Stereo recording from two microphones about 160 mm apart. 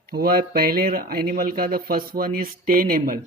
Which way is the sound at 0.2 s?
65° right (ahead or behind).